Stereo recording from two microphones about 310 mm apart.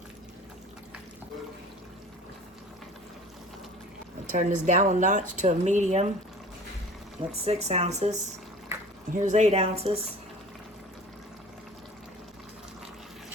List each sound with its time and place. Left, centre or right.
4.4 s speech: right
7.4 s speech: centre